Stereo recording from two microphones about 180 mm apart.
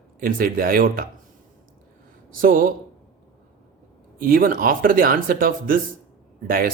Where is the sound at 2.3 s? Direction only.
50° right (ahead or behind).